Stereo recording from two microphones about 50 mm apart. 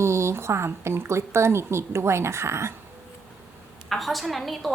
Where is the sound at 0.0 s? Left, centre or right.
Right.